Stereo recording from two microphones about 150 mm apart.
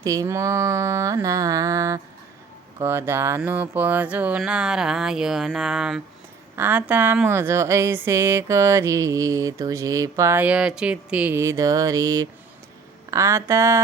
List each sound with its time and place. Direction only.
0.0 s speech: 20° right (ahead or behind)